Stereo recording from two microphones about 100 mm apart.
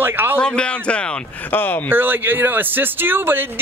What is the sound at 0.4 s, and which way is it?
Speech, 10° left (ahead or behind).